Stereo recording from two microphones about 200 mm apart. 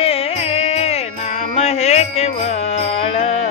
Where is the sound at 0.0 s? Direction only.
30° left (ahead or behind).